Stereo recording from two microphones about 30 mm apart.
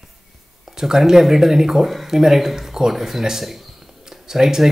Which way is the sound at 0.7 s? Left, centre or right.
Centre.